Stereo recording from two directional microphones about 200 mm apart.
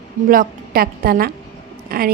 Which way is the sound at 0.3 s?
45° right (ahead or behind).